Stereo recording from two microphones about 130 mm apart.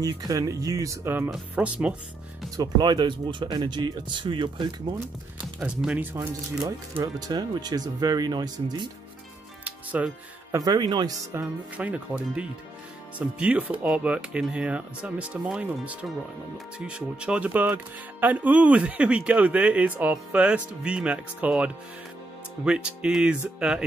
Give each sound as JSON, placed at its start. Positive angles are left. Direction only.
{"t": 0.0, "sound": "speech", "side_deg": -25}
{"t": 2.5, "sound": "speech", "side_deg": -30}
{"t": 5.6, "sound": "speech", "side_deg": -5}
{"t": 7.0, "sound": "speech", "side_deg": -30}
{"t": 9.7, "sound": "music", "side_deg": -10}
{"t": 10.6, "sound": "speech", "side_deg": -30}
{"t": 11.3, "sound": "speech", "side_deg": -10}